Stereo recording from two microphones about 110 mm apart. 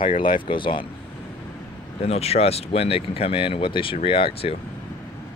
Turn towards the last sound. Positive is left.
turn(degrees=55)  # may be behind; listen again after turning